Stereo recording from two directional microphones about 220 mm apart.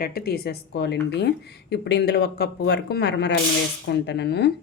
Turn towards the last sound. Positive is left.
turn(degrees=50)  # may be behind; listen again after turning